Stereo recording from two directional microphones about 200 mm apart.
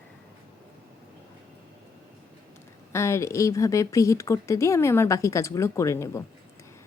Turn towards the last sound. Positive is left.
turn(degrees=15)  # may be behind; listen again after turning